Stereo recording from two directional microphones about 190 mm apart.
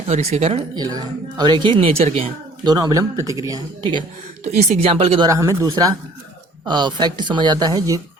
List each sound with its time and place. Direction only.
0.1 s speech: 35° right (ahead or behind)
0.8 s speech: 20° right (ahead or behind)
2.6 s speech: 20° right (ahead or behind)
4.4 s speech: 35° right (ahead or behind); by 8.0 s 20° right (ahead or behind)